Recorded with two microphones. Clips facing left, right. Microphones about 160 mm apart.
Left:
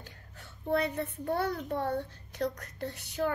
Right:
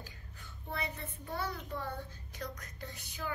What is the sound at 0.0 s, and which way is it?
A child's voice, 65° left (ahead or behind).